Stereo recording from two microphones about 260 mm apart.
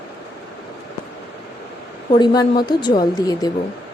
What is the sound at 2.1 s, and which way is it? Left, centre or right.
Speech, centre.